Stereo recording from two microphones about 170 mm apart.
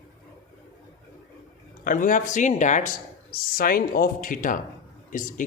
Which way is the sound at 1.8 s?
50° left (ahead or behind).